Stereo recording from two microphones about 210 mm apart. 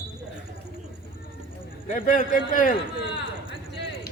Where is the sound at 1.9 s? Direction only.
40° left (ahead or behind).